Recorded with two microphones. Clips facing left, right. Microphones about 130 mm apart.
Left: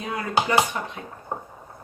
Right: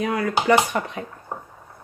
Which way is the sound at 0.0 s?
75° right (ahead or behind).